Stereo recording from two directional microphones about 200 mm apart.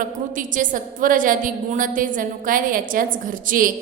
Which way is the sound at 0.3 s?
40° right (ahead or behind).